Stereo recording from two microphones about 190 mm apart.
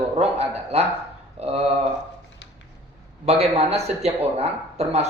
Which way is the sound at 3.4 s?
35° right (ahead or behind).